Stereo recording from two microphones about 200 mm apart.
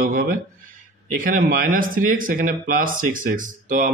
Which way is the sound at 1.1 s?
45° right (ahead or behind).